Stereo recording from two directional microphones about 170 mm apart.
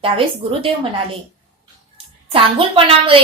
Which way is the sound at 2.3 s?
30° right (ahead or behind).